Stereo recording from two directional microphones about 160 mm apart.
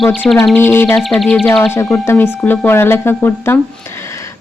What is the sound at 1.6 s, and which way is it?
Speech, 15° left (ahead or behind).